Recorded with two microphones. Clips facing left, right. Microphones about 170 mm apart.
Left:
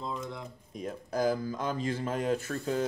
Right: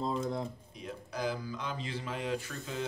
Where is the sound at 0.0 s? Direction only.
35° right (ahead or behind).